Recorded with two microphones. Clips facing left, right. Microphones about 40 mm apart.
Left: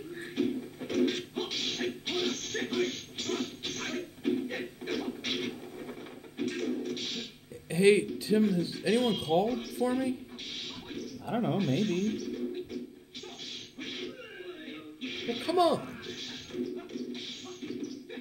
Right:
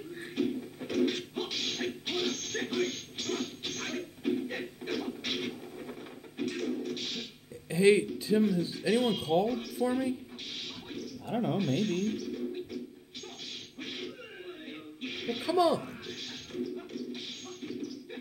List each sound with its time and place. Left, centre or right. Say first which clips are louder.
0.2 s music: left 1 dB; centre
7.7 s a sound: even; centre
8.4 s speech: even; centre
9.2 s speech: even; left
9.5 s speech: even; centre
11.2 s speech: left 1 dB; centre
13.7 s a sound: left 1 dB; centre
15.0 s music: even; centre
15.5 s a sound: even; left
15.8 s music: left 1 dB; centre